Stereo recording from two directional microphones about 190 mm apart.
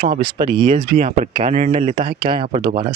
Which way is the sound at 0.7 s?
40° right (ahead or behind).